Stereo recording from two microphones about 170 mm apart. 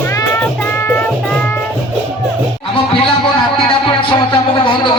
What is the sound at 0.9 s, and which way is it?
Music, 10° left (ahead or behind).